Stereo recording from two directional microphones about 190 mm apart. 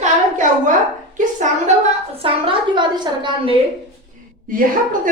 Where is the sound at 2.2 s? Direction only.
25° right (ahead or behind).